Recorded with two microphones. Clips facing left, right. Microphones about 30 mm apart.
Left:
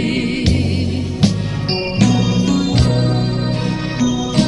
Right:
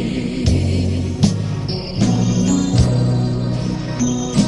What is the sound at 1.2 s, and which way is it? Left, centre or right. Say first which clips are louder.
Music: left 1 dB; left.